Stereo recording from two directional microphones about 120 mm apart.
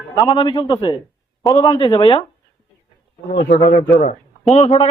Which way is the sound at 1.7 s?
50° left (ahead or behind).